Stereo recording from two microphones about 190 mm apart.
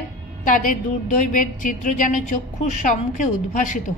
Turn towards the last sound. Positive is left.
turn(degrees=45)  # may be behind; listen again after turning